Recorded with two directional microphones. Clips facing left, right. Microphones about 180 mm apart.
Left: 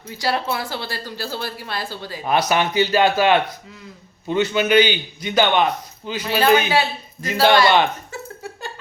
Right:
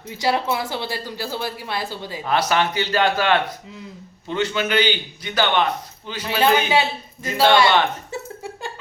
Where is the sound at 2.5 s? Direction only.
15° left (ahead or behind).